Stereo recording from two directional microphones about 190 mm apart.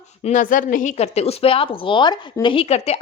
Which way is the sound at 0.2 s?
40° left (ahead or behind).